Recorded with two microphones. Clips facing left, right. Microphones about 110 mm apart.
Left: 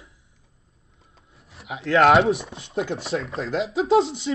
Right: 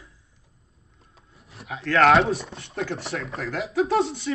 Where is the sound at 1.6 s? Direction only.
25° left (ahead or behind).